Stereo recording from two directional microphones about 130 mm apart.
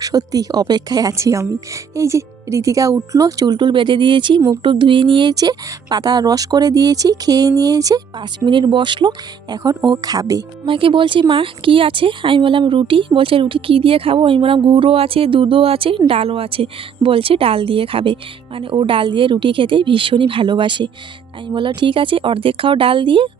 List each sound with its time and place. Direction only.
0.0 s speech: 25° right (ahead or behind)
10.7 s speech: 40° right (ahead or behind)